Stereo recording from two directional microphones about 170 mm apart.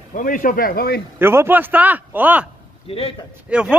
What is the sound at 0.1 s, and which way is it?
Speech, 55° left (ahead or behind).